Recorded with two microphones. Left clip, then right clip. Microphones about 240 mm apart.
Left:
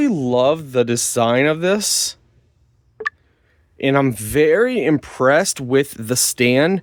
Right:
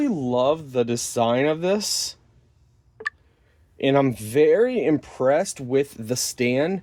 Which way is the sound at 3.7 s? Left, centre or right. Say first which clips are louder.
Left 3 dB; left.